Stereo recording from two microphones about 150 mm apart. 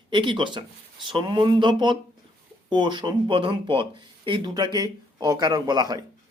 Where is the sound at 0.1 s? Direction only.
30° right (ahead or behind).